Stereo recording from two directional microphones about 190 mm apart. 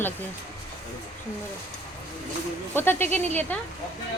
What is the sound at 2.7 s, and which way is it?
Speech, 10° left (ahead or behind).